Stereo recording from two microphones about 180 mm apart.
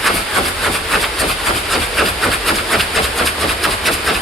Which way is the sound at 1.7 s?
Centre (ahead or behind).